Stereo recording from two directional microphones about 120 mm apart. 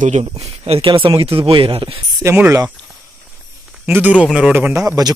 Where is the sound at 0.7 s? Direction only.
50° right (ahead or behind).